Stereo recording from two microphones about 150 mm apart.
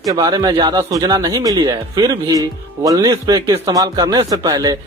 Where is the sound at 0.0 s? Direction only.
25° right (ahead or behind).